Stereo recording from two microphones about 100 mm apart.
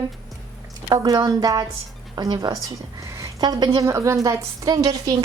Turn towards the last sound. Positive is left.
turn(degrees=-35)  # may be behind; listen again after turning